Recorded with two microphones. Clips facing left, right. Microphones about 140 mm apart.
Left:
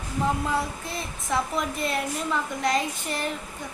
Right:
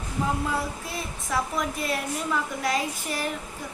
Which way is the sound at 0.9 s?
5° right (ahead or behind).